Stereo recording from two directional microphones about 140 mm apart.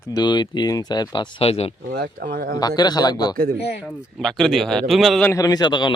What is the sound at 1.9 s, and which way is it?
Speech, 90° right.